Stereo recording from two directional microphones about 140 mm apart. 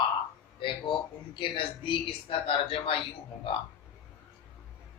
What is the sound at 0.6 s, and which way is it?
Speech, 35° left (ahead or behind).